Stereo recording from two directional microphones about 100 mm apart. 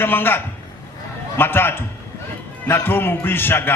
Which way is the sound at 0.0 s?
20° left (ahead or behind).